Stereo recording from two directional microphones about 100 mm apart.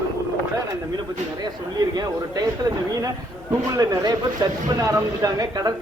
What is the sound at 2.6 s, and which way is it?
Speech, 35° right (ahead or behind).